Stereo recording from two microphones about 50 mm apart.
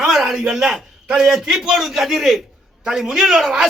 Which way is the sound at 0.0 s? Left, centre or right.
Centre.